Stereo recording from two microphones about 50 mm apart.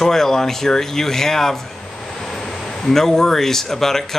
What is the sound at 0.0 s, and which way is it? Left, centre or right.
A man's voice, centre.